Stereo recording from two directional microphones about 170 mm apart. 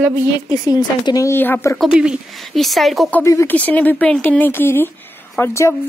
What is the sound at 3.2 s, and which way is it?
Speech, 15° left (ahead or behind).